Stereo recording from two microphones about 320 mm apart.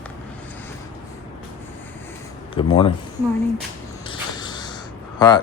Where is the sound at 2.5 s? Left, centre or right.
Centre.